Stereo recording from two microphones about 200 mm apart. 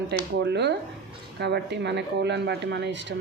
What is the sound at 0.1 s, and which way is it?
Speech, 60° right (ahead or behind).